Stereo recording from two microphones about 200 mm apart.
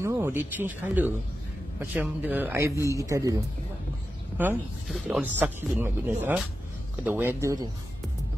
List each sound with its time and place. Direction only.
0.0 s speech: 10° right (ahead or behind)
4.4 s speech: 5° right (ahead or behind)